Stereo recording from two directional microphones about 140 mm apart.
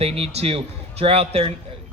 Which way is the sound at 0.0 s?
45° right (ahead or behind).